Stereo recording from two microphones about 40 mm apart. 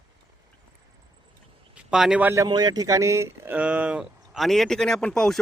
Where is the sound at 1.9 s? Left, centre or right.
Centre.